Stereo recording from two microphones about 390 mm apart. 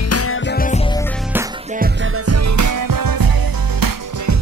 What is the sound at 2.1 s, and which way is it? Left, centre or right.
Music, right.